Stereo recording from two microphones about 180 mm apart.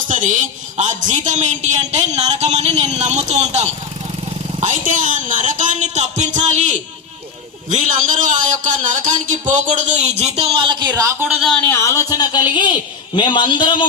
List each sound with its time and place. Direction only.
0.1 s a man's voice: 45° right (ahead or behind); by 11.4 s 10° right (ahead or behind)
11.7 s a man's voice: 15° left (ahead or behind)